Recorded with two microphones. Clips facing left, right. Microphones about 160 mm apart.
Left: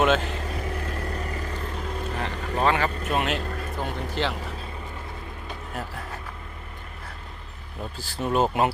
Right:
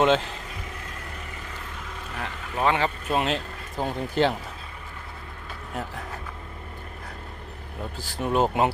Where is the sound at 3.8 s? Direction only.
45° right (ahead or behind).